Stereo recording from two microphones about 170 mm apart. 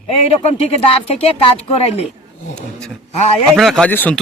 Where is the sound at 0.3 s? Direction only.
35° left (ahead or behind).